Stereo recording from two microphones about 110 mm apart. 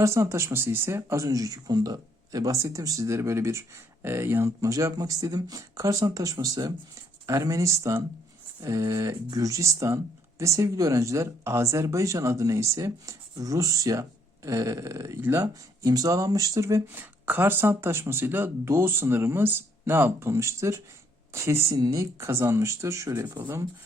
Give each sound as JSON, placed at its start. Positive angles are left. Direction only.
{"t": 0.0, "sound": "speech", "side_deg": -25}
{"t": 23.2, "sound": "speech", "side_deg": -20}